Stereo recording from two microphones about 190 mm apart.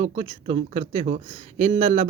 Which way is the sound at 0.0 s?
30° right (ahead or behind).